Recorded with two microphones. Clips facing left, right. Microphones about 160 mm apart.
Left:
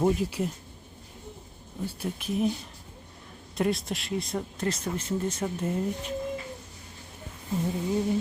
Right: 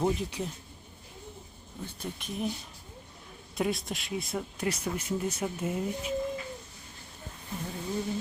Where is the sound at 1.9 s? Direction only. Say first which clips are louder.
Left 7 dB; 5° left (ahead or behind).